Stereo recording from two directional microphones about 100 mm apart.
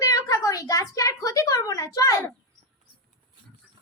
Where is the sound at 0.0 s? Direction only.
35° left (ahead or behind).